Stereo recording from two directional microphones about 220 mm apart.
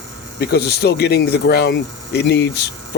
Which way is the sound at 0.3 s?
45° left (ahead or behind).